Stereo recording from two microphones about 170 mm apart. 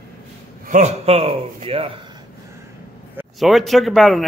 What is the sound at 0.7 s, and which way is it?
A man's voice, 40° right (ahead or behind).